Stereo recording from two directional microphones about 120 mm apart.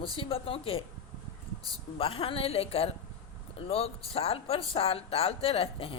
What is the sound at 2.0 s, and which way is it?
Speech, 50° left (ahead or behind).